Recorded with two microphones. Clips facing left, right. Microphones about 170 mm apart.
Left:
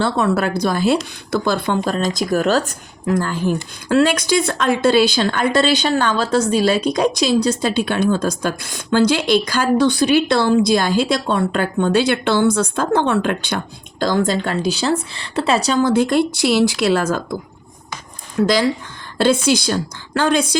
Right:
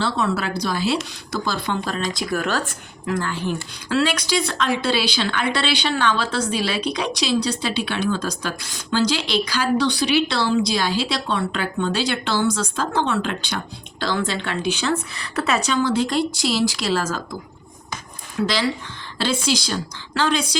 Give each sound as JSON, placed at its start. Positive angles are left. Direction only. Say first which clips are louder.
{"t": 0.0, "sound": "speech", "louder": "left 5 dB", "side_deg": 55}
{"t": 14.0, "sound": "speech", "louder": "left 6 dB", "side_deg": 45}
{"t": 18.4, "sound": "speech", "louder": "left 6 dB", "side_deg": 45}